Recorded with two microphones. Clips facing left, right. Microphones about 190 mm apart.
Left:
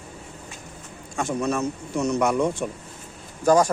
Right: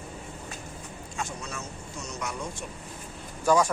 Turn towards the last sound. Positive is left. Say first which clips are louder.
# left 5 dB
turn(degrees=40)  # may be behind; listen again after turning